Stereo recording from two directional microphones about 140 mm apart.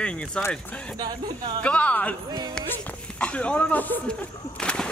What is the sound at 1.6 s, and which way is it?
Speech, 10° left (ahead or behind).